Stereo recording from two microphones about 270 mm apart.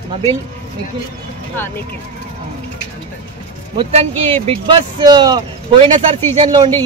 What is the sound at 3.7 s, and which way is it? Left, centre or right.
Speech, right.